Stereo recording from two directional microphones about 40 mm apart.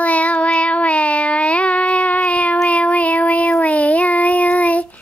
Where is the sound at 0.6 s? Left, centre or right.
Left.